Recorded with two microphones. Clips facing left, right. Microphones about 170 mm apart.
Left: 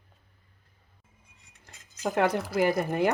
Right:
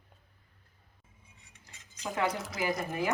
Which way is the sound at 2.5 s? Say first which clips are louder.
Left 8 dB; 60° left (ahead or behind).